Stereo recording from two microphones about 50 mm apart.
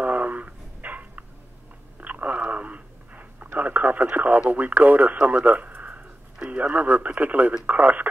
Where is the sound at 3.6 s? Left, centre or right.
Right.